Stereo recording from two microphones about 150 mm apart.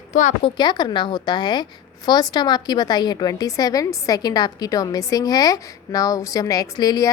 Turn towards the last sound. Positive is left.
turn(degrees=25)  # may be behind; listen again after turning